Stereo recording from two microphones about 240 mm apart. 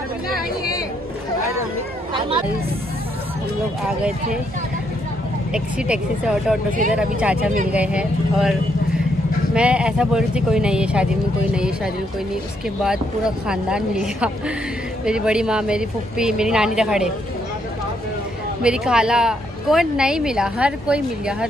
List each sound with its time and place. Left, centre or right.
2.1 s hubbub: right
3.8 s speech: centre
5.5 s speech: centre
18.6 s speech: centre